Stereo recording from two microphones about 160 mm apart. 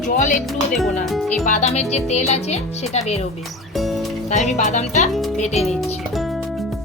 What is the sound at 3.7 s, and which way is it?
Music, centre (ahead or behind).